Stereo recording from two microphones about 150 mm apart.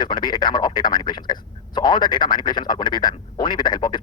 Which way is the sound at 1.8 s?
30° left (ahead or behind).